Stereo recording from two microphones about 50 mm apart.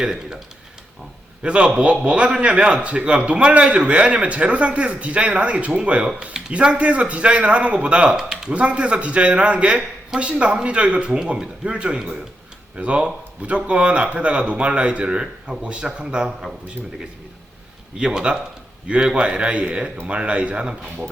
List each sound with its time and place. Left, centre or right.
0.0 s speech: centre
1.4 s a man's voice: centre
17.9 s a man's voice: centre